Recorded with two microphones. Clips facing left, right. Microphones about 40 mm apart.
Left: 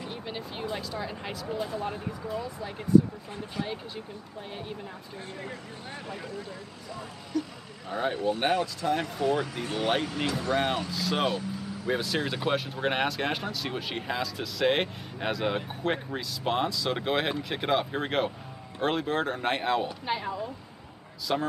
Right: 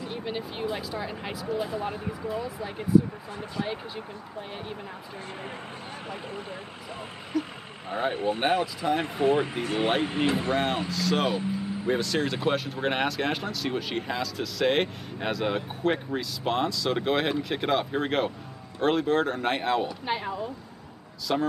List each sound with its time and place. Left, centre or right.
0.1 s speech: centre
6.0 s speech: right
7.3 s speech: centre
9.0 s speech: right
10.9 s speech: centre
11.4 s vehicle: right
12.2 s speech: centre
21.3 s speech: centre